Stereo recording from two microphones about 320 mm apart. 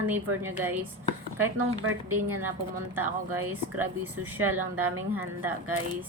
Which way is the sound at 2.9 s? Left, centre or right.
Centre.